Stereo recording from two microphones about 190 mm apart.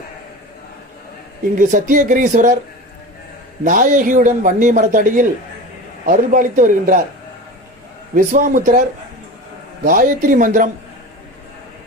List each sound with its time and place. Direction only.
1.5 s a man's voice: 45° right (ahead or behind)
3.6 s a man's voice: 45° right (ahead or behind)
8.1 s a man's voice: 45° right (ahead or behind)
9.8 s a man's voice: 45° right (ahead or behind)